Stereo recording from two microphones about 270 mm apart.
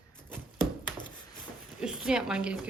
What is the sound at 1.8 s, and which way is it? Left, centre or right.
Speech, centre.